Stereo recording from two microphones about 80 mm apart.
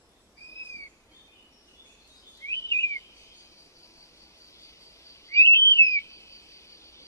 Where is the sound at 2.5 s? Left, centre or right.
Left.